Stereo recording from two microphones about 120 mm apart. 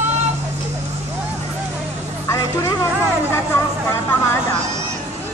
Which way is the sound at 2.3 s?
25° left (ahead or behind).